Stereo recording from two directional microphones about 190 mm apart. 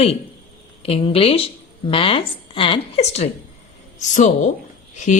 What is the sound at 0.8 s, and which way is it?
A woman's voice, 30° left (ahead or behind).